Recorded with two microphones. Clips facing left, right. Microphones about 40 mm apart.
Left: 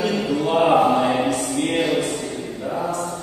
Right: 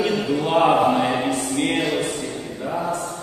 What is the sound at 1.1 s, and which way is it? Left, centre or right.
Choir, centre.